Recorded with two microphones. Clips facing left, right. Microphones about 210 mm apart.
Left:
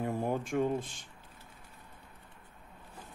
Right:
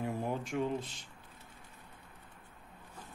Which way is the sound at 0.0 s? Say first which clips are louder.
Left 3 dB; 50° left (ahead or behind).